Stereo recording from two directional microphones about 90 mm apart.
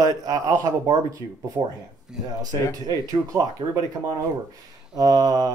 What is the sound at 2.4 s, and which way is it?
Speech, 45° right (ahead or behind).